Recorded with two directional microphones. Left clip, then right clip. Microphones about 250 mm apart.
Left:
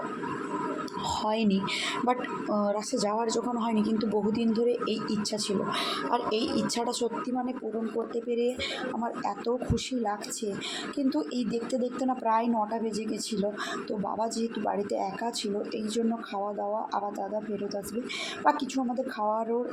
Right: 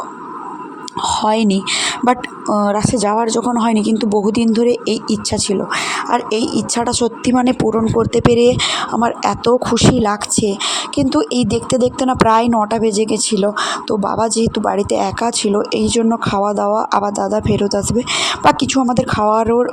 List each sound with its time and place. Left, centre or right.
1.0 s speech: right